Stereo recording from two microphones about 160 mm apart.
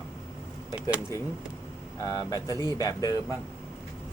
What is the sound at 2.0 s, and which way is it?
Speech, 25° left (ahead or behind).